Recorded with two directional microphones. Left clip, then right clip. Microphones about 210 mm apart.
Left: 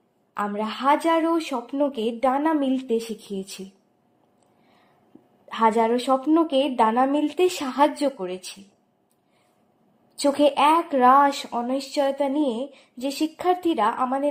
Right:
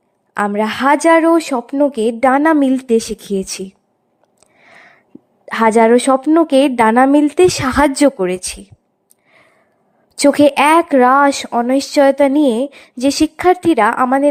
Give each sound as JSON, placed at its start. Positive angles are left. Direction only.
{"t": 0.3, "sound": "speech", "side_deg": -45}
{"t": 5.5, "sound": "speech", "side_deg": -45}
{"t": 10.2, "sound": "speech", "side_deg": -50}